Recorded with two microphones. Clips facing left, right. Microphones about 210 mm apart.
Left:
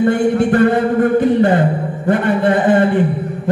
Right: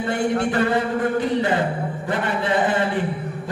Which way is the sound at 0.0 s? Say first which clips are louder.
Left 8 dB; 55° left (ahead or behind).